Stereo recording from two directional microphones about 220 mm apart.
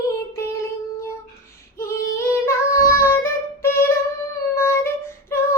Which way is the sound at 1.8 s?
10° left (ahead or behind).